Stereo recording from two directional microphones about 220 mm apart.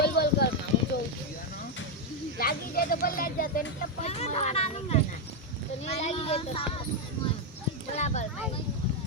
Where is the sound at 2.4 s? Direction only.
40° left (ahead or behind).